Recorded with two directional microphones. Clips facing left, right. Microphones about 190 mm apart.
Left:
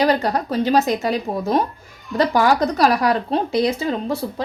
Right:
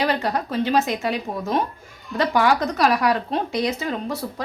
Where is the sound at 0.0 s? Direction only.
40° left (ahead or behind).